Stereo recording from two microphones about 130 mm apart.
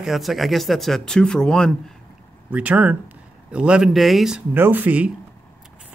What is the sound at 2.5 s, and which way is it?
Speech, 10° right (ahead or behind).